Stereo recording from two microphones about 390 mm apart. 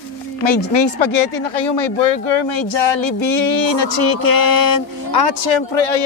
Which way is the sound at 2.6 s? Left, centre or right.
Left.